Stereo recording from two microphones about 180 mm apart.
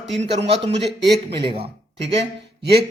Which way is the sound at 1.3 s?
30° right (ahead or behind).